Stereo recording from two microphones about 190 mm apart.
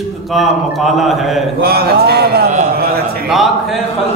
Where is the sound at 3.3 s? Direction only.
Centre (ahead or behind).